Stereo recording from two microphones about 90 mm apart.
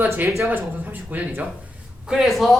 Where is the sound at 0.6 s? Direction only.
20° right (ahead or behind).